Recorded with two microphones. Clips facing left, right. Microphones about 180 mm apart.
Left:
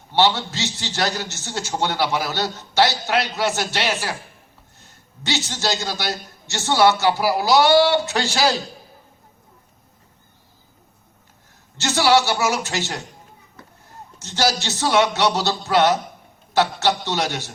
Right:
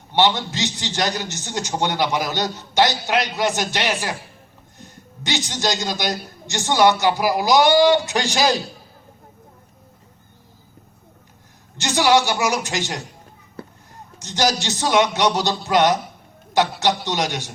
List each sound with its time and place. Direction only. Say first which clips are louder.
0.1 s a man's voice: even; 15° right (ahead or behind)
11.8 s a man's voice: even; 15° right (ahead or behind)
14.2 s a man's voice: right 1 dB; 15° right (ahead or behind)